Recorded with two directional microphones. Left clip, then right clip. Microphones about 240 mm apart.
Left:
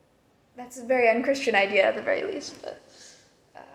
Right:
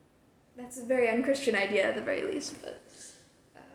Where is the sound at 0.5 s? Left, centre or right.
Centre.